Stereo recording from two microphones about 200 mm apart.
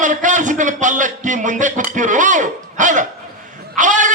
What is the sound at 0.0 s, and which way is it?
A man's voice, 40° right (ahead or behind).